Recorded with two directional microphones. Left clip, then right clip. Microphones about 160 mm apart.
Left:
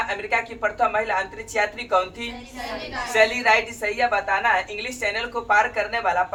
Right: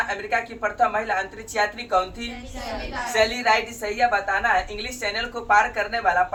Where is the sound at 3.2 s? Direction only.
20° left (ahead or behind).